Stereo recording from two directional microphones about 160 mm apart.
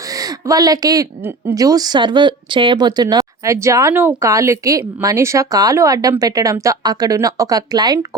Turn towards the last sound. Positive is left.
turn(degrees=-25)  # may be behind; listen again after turning